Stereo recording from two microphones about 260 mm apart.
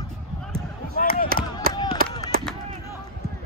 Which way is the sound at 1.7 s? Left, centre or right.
Centre.